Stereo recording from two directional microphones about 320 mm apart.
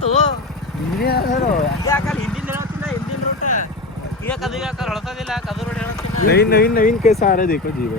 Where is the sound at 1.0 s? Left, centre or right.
Left.